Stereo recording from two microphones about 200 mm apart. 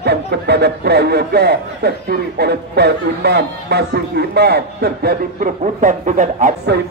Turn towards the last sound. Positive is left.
turn(degrees=-40)  # may be behind; listen again after turning